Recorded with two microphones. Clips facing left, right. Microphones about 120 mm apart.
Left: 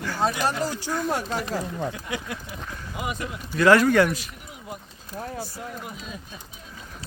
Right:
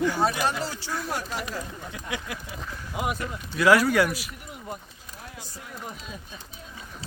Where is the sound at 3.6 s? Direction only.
10° right (ahead or behind).